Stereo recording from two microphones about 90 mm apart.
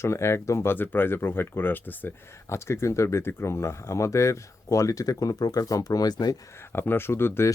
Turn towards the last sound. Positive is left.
turn(degrees=25)  # may be behind; listen again after turning